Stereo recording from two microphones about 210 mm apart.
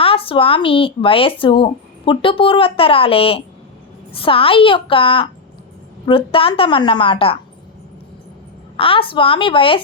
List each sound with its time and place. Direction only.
0.0 s speech: 25° left (ahead or behind)
8.7 s speech: 25° left (ahead or behind)